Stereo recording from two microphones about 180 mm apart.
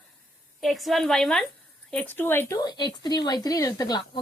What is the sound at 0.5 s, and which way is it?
A woman's voice, centre (ahead or behind).